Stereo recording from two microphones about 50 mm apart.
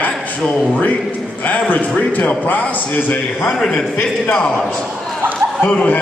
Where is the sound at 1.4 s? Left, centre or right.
Left.